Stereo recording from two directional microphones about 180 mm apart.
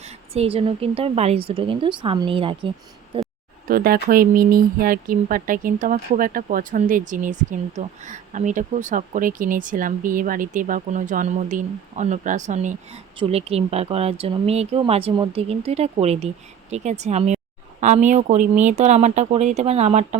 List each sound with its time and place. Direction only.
0.0 s speech: 35° right (ahead or behind)
3.7 s speech: 55° right (ahead or behind); by 20.1 s 35° right (ahead or behind)